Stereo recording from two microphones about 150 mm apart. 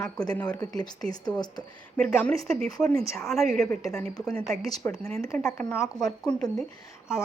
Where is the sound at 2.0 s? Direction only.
10° left (ahead or behind).